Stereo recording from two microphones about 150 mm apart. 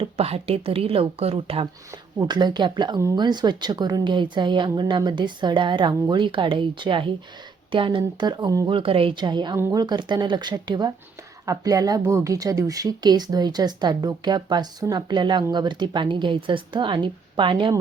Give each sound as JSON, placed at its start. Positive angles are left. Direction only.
{"t": 0.0, "sound": "a woman's voice", "side_deg": -40}
{"t": 2.1, "sound": "a woman's voice", "side_deg": -30}
{"t": 9.6, "sound": "speech", "side_deg": -15}
{"t": 9.8, "sound": "a woman's voice", "side_deg": -30}